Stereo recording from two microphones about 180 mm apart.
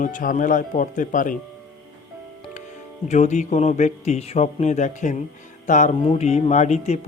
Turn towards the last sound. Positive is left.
turn(degrees=40)  # may be behind; listen again after turning